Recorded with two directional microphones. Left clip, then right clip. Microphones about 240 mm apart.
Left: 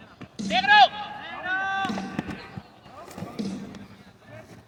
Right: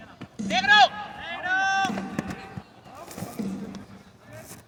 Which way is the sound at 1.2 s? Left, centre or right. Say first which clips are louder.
Right 4 dB; right.